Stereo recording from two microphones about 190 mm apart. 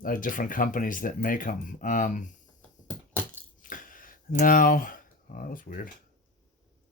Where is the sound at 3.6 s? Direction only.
45° left (ahead or behind).